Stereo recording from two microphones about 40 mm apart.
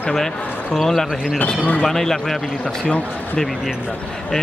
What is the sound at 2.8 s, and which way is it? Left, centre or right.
Speech, left.